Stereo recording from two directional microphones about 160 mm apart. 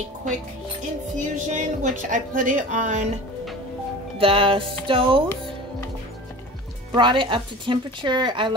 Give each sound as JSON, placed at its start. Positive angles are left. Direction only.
{"t": 1.1, "sound": "a woman's voice", "side_deg": -50}
{"t": 4.2, "sound": "speech", "side_deg": -35}
{"t": 6.9, "sound": "speech", "side_deg": -30}